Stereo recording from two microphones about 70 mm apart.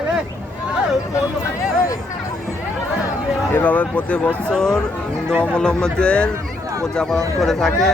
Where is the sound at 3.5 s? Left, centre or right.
Left; by 7.9 s centre.